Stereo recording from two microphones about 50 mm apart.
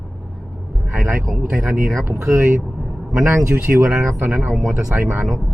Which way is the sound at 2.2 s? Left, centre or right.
Right.